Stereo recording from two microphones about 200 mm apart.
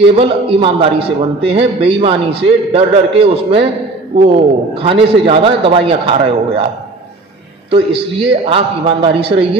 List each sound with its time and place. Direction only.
0.0 s a man's voice: 25° right (ahead or behind)
7.7 s a man's voice: 25° right (ahead or behind)